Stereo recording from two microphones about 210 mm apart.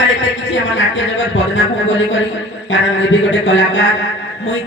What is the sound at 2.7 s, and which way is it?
Speech, 60° left (ahead or behind).